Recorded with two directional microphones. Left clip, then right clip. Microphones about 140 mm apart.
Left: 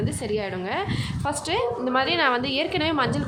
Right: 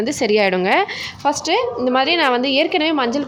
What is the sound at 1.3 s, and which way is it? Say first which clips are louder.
A woman's voice: right 7 dB; 35° right (ahead or behind).